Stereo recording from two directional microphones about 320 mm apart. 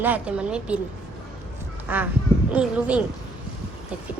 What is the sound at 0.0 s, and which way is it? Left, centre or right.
Speech, centre.